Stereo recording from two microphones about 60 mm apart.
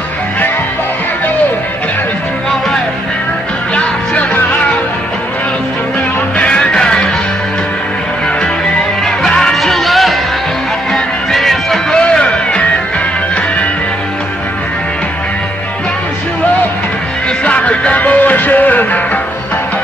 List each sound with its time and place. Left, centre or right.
3.7 s music: left
6.3 s music: centre
9.0 s music: centre
12.0 s music: centre
17.5 s music: left